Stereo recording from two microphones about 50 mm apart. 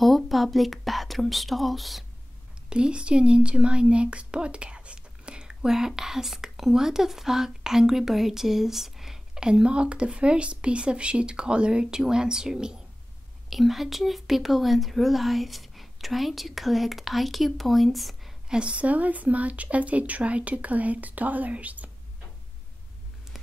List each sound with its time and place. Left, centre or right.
0.0 s a woman's voice: centre
2.7 s speech: centre
13.5 s speech: centre
18.5 s speech: right